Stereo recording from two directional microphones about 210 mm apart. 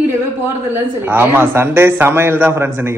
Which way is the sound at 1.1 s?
10° right (ahead or behind).